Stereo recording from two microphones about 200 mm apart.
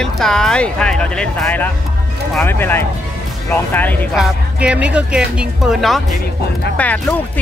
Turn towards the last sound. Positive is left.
turn(degrees=5)  # may be behind; listen again after turning